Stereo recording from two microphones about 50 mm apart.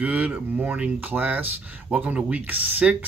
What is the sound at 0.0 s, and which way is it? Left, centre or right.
Speech, right.